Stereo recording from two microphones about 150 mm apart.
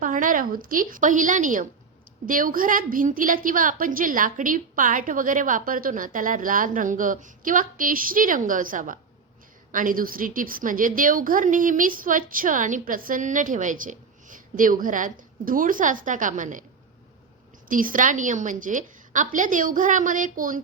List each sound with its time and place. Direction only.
0.0 s a woman's voice: 60° right (ahead or behind)
17.7 s a woman's voice: 65° right (ahead or behind)